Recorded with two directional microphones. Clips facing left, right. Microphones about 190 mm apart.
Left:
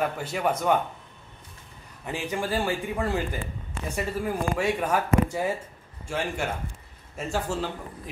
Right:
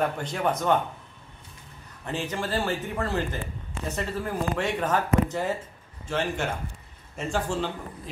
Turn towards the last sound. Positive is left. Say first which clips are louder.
# right 1 dB
turn(degrees=5)  # may be behind; listen again after turning